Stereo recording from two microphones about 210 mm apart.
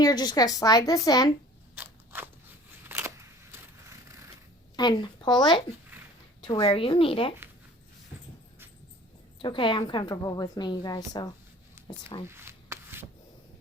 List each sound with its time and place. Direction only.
0.0 s a woman's voice: 20° left (ahead or behind)
1.7 s scissors: 10° right (ahead or behind)
4.8 s a woman's voice: 20° left (ahead or behind)
9.4 s a woman's voice: 25° left (ahead or behind)
12.3 s shuffling cards: 10° right (ahead or behind)